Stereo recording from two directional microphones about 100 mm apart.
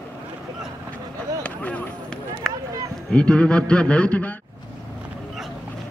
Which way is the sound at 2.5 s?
Centre (ahead or behind).